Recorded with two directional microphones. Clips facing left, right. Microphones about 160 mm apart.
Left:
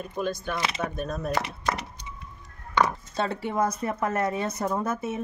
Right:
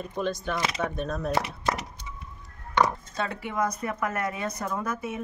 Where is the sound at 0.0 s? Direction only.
5° left (ahead or behind).